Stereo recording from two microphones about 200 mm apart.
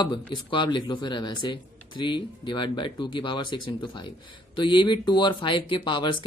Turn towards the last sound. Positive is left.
turn(degrees=25)  # may be behind; listen again after turning